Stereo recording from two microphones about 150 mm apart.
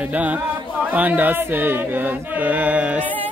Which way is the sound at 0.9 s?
10° right (ahead or behind).